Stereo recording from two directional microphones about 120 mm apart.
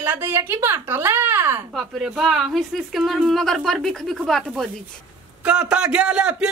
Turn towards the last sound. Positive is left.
turn(degrees=-10)  # may be behind; listen again after turning